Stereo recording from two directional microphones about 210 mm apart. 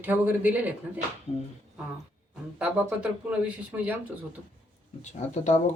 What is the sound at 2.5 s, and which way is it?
Speech, 5° right (ahead or behind).